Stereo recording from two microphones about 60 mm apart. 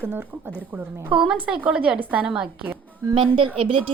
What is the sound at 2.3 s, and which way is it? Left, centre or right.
Speech, centre.